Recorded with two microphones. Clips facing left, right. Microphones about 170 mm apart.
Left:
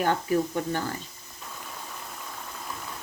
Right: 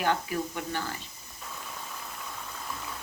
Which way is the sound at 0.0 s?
40° left (ahead or behind).